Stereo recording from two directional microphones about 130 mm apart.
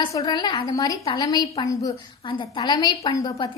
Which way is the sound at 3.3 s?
40° left (ahead or behind).